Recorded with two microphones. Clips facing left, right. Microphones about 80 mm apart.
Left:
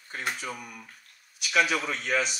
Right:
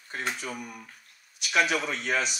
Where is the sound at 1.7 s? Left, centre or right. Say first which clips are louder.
Even; right.